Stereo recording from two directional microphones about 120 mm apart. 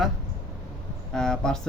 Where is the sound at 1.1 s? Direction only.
5° left (ahead or behind).